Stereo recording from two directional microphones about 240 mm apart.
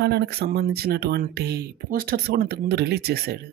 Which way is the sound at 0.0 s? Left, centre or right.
Right.